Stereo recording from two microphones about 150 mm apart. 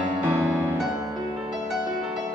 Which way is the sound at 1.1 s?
25° right (ahead or behind).